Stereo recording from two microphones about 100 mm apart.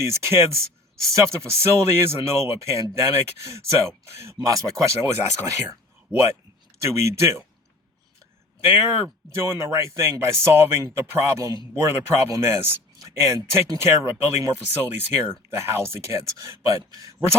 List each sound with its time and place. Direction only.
0.0 s speech: 25° right (ahead or behind)
8.7 s speech: 25° right (ahead or behind)